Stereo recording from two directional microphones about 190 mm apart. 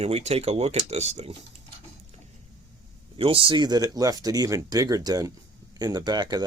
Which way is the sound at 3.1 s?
30° right (ahead or behind).